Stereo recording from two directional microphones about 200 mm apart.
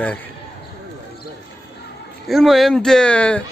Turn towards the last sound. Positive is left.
turn(degrees=5)  # may be behind; listen again after turning